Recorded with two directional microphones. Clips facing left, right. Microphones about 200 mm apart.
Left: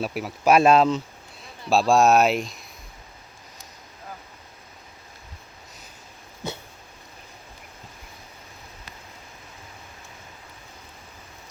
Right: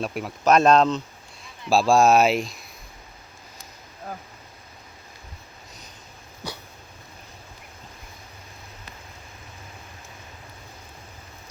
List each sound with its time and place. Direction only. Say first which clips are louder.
0.0 s speech: left 1 dB; 5° left (ahead or behind)